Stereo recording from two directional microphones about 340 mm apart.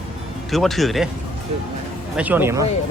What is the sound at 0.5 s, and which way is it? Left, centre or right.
Speech, centre.